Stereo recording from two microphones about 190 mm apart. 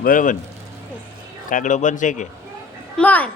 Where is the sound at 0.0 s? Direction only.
45° left (ahead or behind).